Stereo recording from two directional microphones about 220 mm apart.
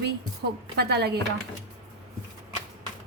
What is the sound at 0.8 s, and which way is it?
Speech, 45° right (ahead or behind).